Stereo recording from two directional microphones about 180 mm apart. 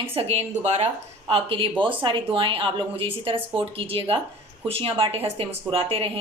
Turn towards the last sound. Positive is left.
turn(degrees=-30)  # may be behind; listen again after turning